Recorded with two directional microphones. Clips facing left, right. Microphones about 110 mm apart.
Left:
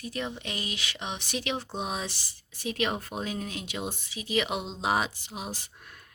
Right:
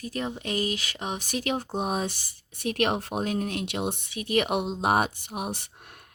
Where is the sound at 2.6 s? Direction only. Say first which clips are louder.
Right 4 dB; 60° right (ahead or behind).